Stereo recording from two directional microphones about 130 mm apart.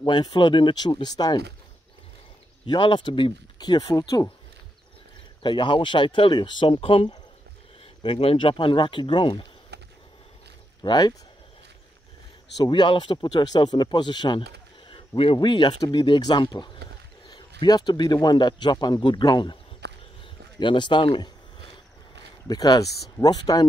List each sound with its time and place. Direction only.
0.0 s a man's voice: 35° left (ahead or behind)
2.6 s a man's voice: 40° left (ahead or behind)
5.4 s a man's voice: 40° left (ahead or behind)
10.8 s speech: 30° left (ahead or behind)
12.5 s a man's voice: 35° left (ahead or behind)
22.5 s a man's voice: 30° left (ahead or behind)